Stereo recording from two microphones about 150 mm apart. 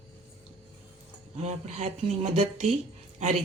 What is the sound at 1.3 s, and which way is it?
Speech, 50° right (ahead or behind).